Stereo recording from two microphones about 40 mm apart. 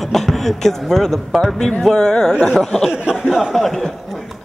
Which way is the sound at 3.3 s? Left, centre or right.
Centre.